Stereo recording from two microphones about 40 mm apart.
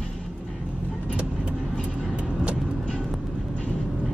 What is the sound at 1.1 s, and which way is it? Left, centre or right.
Vehicle, right.